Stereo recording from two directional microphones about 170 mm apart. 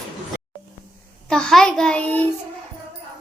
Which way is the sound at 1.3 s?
5° left (ahead or behind).